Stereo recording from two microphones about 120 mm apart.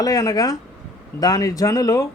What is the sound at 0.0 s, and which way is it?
A man's voice, 30° left (ahead or behind).